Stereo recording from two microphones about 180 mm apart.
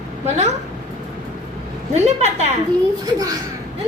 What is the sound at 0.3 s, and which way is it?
Speech, 40° right (ahead or behind).